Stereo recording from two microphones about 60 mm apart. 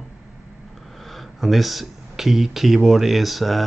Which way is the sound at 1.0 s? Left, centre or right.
Centre.